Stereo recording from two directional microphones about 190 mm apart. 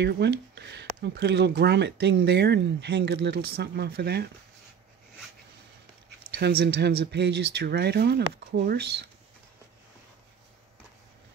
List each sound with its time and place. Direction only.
0.0 s speech: 60° right (ahead or behind)
6.3 s speech: 60° right (ahead or behind)